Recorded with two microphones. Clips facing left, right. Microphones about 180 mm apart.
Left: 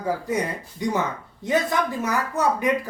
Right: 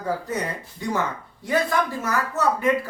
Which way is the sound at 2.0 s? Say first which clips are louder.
Left 1 dB; 15° left (ahead or behind).